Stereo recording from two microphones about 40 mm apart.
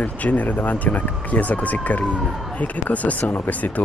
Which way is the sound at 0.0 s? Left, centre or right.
Left.